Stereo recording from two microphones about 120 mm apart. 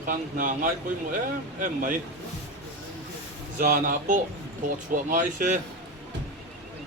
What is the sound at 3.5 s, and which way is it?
Speech, 90° right.